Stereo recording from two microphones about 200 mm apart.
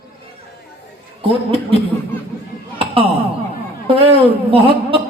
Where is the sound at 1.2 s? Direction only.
25° right (ahead or behind).